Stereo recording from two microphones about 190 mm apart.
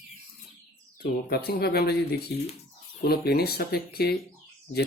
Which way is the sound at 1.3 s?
55° left (ahead or behind).